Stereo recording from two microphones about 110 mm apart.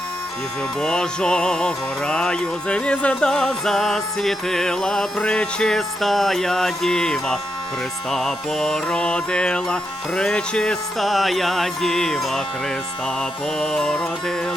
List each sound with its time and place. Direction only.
0.8 s music: 5° left (ahead or behind)
13.6 s music: 10° left (ahead or behind)